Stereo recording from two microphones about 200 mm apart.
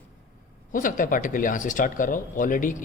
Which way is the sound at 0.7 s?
40° left (ahead or behind).